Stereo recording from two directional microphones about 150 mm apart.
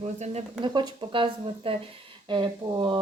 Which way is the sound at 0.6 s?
30° right (ahead or behind).